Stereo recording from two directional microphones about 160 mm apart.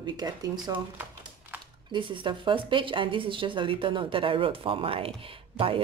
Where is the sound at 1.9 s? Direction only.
30° right (ahead or behind).